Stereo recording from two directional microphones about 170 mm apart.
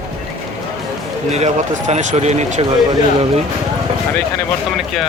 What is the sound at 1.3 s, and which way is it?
Speech, 40° right (ahead or behind).